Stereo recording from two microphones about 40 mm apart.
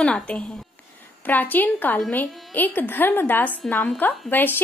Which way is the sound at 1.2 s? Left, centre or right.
Left.